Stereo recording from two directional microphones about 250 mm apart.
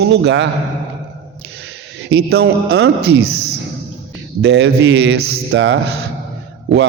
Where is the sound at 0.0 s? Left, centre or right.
Right.